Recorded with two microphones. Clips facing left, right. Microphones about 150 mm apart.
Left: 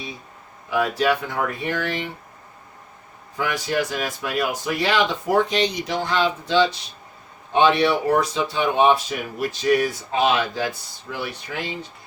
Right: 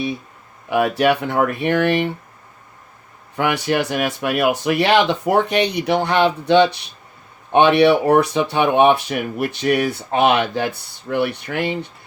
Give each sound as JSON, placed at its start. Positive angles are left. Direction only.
{"t": 0.7, "sound": "speech", "side_deg": -65}
{"t": 3.3, "sound": "speech", "side_deg": -65}